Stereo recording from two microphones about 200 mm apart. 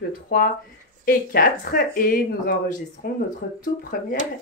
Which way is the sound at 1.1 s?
45° left (ahead or behind).